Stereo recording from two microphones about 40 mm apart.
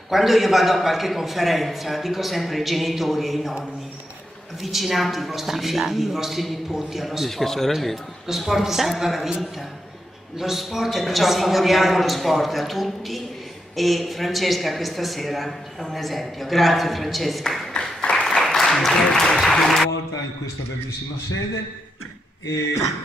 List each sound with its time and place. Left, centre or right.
0.1 s a woman's voice: centre
4.6 s a woman's voice: centre
7.2 s a woman's voice: centre
8.3 s a woman's voice: centre
18.1 s applause: centre